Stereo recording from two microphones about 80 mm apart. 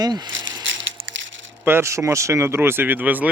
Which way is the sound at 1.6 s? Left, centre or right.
Right.